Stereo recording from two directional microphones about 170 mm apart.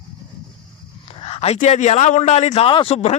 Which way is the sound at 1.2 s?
35° left (ahead or behind).